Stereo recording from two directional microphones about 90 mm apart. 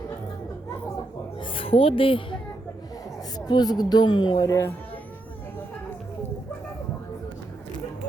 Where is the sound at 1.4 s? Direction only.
80° left.